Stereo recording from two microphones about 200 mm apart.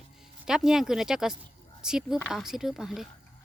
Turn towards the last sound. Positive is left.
turn(degrees=0)  # may be behind; listen again after turning